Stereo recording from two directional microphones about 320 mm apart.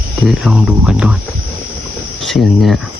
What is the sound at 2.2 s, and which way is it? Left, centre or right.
Speech, centre.